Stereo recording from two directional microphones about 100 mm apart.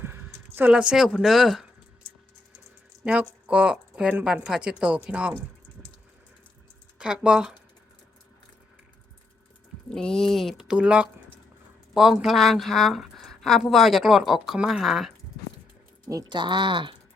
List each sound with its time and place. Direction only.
0.0 s a sound: 20° right (ahead or behind)
0.5 s speech: 15° right (ahead or behind)
3.0 s speech: 10° right (ahead or behind)
7.0 s speech: 10° right (ahead or behind)
9.9 s speech: 5° left (ahead or behind)
10.7 s speech: 10° right (ahead or behind)
16.0 s speech: 35° right (ahead or behind); by 16.9 s 55° right (ahead or behind)